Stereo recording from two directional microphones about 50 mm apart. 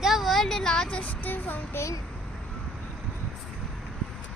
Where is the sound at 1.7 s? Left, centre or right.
Left.